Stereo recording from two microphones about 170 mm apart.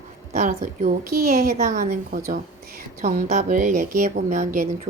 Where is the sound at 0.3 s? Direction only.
50° right (ahead or behind).